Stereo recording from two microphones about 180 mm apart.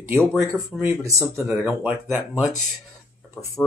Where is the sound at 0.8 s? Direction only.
15° right (ahead or behind).